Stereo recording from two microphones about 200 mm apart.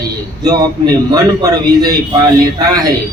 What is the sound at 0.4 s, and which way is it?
A man's voice, 20° right (ahead or behind).